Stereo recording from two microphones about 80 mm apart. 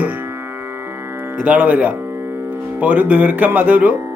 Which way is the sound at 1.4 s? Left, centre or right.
Right.